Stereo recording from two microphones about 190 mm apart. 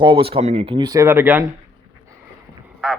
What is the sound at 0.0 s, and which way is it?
Speech, 30° right (ahead or behind).